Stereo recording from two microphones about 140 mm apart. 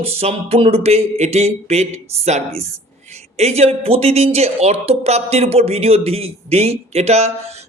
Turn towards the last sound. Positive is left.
turn(degrees=-50)  # may be behind; listen again after turning